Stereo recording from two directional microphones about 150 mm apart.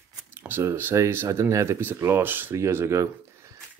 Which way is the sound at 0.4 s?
15° right (ahead or behind).